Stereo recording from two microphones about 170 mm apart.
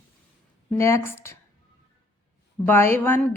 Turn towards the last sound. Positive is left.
turn(degrees=10)  # may be behind; listen again after turning